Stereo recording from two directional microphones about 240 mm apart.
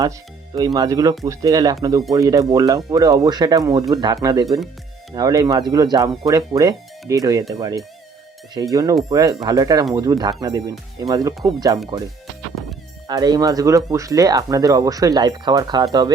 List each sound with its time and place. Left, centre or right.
0.5 s speech: centre
12.6 s music: centre
13.1 s speech: centre